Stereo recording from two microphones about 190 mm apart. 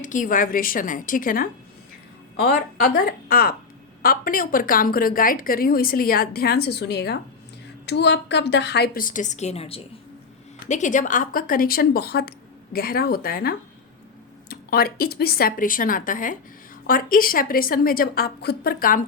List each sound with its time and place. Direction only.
0.0 s a woman's voice: 45° left (ahead or behind)